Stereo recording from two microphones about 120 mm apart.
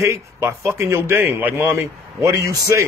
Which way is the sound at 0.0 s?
25° right (ahead or behind).